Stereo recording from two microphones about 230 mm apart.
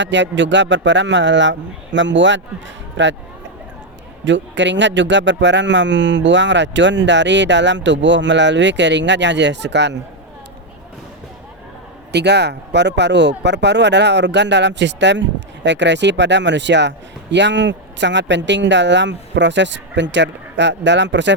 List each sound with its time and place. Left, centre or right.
0.0 s a man's voice: right
4.3 s a man's voice: right
12.1 s a man's voice: right